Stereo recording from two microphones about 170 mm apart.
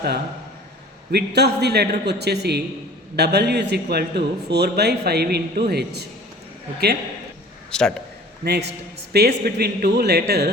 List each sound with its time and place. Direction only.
1.1 s a man's voice: 75° right (ahead or behind)
7.7 s a man's voice: 5° left (ahead or behind)
8.4 s a man's voice: 80° right